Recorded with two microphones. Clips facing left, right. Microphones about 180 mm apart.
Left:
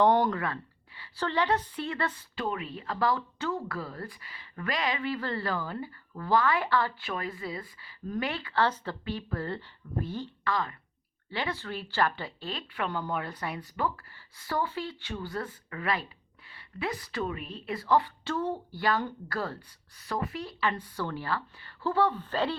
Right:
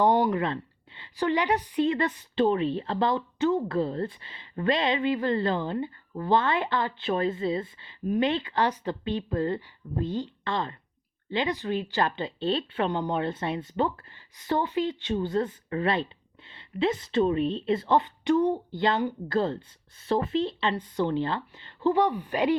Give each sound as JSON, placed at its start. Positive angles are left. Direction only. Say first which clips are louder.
{"t": 0.0, "sound": "speech", "louder": "right 1 dB", "side_deg": -15}